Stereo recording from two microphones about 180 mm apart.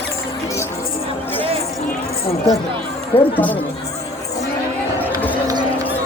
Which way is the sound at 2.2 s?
35° left (ahead or behind).